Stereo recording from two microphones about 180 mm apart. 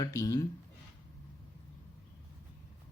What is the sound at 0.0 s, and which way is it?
Speech, 20° left (ahead or behind).